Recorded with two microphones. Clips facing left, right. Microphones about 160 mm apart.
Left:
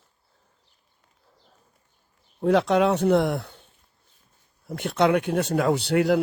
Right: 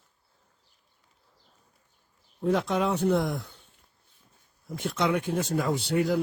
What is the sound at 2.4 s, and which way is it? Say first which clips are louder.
Speech: left 6 dB; 80° left.